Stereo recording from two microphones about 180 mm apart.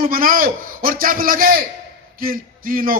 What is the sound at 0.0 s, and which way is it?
Speech, 50° right (ahead or behind).